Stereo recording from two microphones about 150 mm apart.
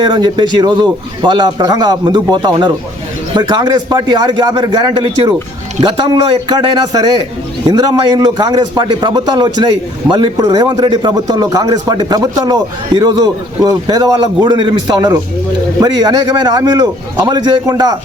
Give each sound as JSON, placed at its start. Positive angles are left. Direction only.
{"t": 0.0, "sound": "speech", "side_deg": -30}